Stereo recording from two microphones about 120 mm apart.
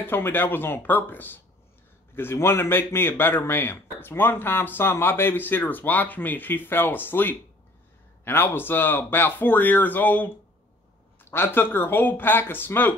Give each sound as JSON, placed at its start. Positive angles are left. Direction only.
{"t": 0.0, "sound": "speech", "side_deg": 20}